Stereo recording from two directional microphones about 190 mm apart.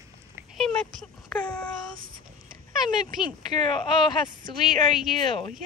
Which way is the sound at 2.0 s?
50° right (ahead or behind).